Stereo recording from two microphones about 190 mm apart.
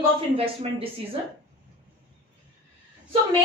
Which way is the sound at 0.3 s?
30° right (ahead or behind).